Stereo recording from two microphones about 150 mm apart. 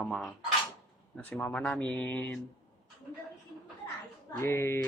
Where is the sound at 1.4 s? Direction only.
10° left (ahead or behind).